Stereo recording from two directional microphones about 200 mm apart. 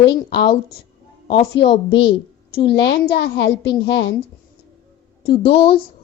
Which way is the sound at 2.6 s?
60° left (ahead or behind).